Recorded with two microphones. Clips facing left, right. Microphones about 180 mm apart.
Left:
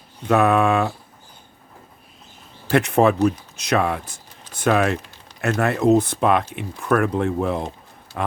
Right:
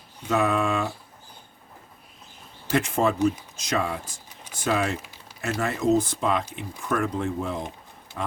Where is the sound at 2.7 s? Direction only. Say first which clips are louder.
Left 6 dB; 65° left (ahead or behind).